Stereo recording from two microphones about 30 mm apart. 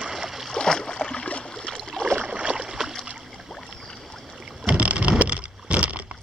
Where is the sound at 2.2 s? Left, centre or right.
Right.